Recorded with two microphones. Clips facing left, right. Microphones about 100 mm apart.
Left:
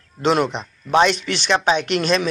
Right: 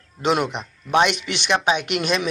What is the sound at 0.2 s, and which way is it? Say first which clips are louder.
Speech: left 3 dB; 10° right (ahead or behind).